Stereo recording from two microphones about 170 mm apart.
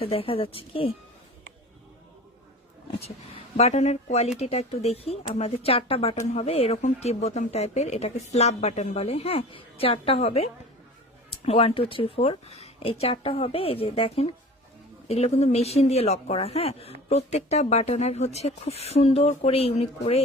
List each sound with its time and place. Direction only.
0.0 s speech: 35° left (ahead or behind)
3.6 s speech: 40° left (ahead or behind)